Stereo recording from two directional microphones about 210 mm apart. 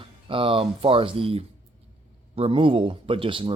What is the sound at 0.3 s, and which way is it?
Speech, 25° right (ahead or behind).